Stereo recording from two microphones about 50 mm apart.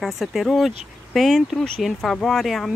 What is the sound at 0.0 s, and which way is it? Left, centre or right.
Speech, centre.